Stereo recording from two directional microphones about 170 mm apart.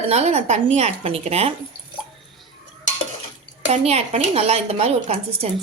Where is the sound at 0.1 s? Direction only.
40° right (ahead or behind).